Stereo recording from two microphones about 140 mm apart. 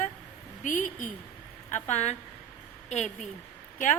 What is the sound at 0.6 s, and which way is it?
Speech, 70° left (ahead or behind).